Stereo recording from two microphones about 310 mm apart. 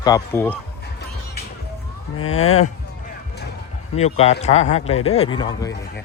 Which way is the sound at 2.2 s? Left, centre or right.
Left.